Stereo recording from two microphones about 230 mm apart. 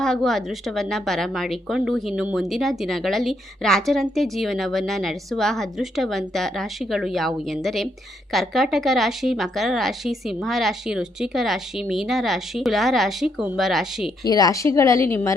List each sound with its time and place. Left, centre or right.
0.0 s speech: centre
14.3 s a woman's voice: centre